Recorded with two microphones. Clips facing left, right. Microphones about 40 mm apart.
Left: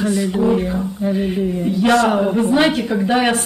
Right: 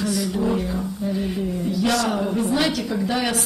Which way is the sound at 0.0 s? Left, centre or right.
Left.